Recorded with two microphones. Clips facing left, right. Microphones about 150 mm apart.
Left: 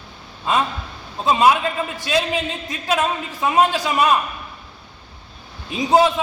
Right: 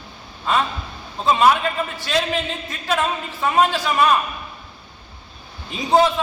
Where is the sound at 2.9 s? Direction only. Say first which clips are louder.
Left 1 dB; 15° left (ahead or behind).